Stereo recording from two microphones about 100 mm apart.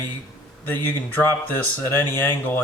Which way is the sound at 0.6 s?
20° left (ahead or behind).